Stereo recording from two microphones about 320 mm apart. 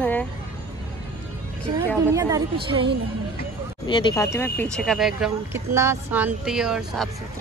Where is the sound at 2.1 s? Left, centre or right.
Centre.